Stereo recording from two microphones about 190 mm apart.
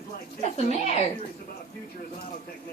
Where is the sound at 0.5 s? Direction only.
35° left (ahead or behind).